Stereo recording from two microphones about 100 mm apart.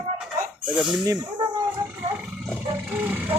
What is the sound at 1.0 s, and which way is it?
Speech, 40° right (ahead or behind).